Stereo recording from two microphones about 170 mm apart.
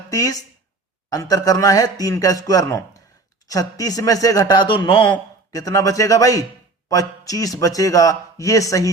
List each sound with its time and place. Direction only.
0.1 s a man's voice: 20° left (ahead or behind)